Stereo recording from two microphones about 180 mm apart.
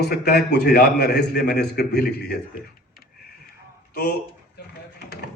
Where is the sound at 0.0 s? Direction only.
65° left (ahead or behind).